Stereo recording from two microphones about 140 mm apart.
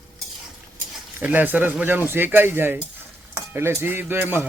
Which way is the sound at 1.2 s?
10° right (ahead or behind).